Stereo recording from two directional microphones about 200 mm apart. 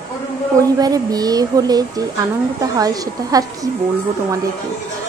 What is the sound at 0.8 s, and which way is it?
A woman's voice, 20° right (ahead or behind).